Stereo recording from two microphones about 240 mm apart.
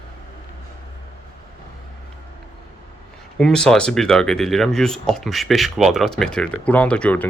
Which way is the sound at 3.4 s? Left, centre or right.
Centre.